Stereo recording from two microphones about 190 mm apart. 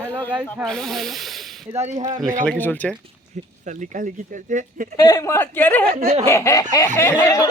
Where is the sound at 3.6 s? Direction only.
40° right (ahead or behind).